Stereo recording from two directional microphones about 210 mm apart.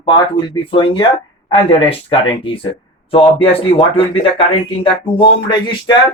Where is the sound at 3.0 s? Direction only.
25° left (ahead or behind).